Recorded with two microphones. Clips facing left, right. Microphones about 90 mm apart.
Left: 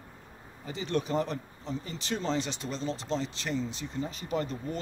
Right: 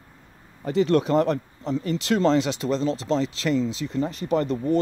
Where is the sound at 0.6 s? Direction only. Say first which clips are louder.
Right 11 dB; 75° right (ahead or behind).